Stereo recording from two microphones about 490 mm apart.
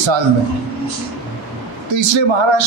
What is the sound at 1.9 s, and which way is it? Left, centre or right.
Speech, right.